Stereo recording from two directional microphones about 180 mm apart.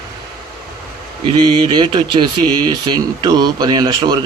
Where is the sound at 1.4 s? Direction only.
25° right (ahead or behind).